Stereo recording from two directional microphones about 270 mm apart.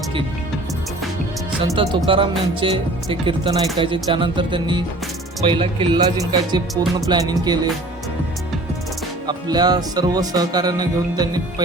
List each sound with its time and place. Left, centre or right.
1.6 s speech: centre
9.2 s speech: centre